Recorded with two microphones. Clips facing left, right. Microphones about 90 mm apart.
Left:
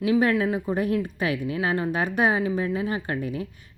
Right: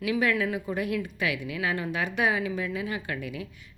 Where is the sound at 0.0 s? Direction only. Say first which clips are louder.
Left 5 dB; 35° left (ahead or behind).